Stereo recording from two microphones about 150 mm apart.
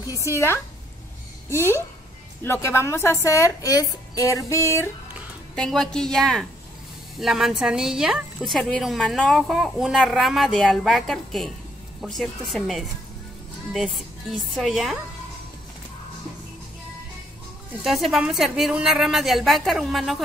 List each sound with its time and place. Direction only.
0.2 s a woman's voice: 15° left (ahead or behind)
2.4 s a woman's voice: 15° left (ahead or behind)
5.6 s a woman's voice: 5° left (ahead or behind)
17.8 s a woman's voice: centre (ahead or behind)